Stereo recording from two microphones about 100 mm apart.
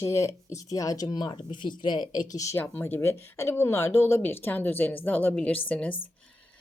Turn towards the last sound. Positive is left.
turn(degrees=15)  # may be behind; listen again after turning